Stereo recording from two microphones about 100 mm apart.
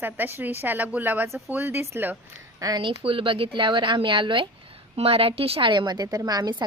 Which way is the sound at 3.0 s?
60° right (ahead or behind).